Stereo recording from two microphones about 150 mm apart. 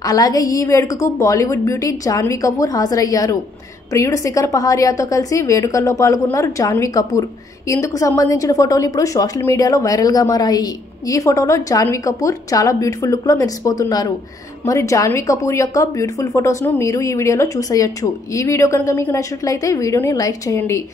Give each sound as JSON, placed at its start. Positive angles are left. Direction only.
{"t": 0.0, "sound": "speech", "side_deg": 25}